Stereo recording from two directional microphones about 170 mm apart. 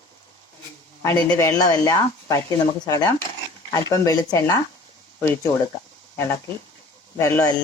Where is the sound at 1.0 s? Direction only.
15° left (ahead or behind).